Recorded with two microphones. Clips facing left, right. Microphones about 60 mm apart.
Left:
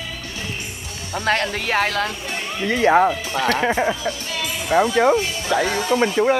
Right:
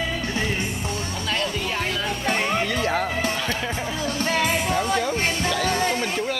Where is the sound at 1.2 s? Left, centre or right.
Left.